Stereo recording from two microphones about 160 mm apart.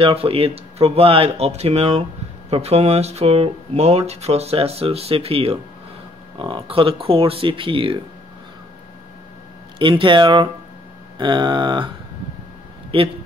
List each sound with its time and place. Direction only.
0.0 s speech: 35° right (ahead or behind)
9.8 s speech: 30° right (ahead or behind)
11.1 s a sound: 30° right (ahead or behind)
12.9 s speech: 35° right (ahead or behind)